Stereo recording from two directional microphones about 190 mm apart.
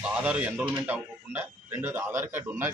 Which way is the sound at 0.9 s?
10° right (ahead or behind).